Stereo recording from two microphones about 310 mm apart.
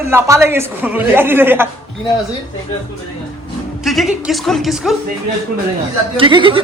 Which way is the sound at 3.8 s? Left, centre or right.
Centre.